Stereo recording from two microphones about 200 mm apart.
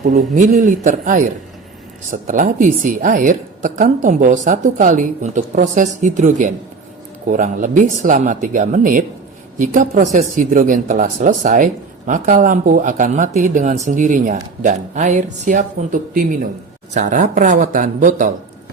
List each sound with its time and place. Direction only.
0.0 s a woman's voice: 40° right (ahead or behind)